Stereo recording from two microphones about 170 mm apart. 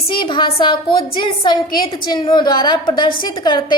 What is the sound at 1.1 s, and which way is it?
A woman's voice, 30° left (ahead or behind).